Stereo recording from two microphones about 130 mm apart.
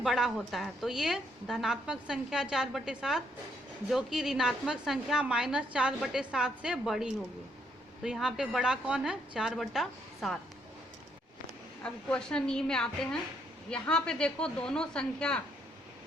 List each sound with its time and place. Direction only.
0.0 s a woman's voice: centre (ahead or behind)
11.8 s a woman's voice: 10° left (ahead or behind)